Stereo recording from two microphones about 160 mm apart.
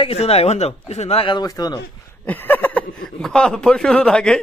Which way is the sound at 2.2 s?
10° left (ahead or behind).